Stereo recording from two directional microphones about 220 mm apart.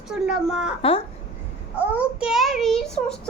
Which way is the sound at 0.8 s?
25° left (ahead or behind).